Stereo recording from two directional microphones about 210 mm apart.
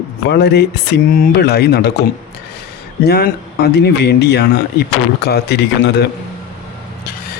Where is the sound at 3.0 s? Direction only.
50° left (ahead or behind).